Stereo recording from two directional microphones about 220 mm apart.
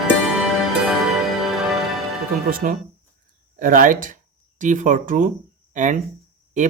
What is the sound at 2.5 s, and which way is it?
Speech, 40° right (ahead or behind).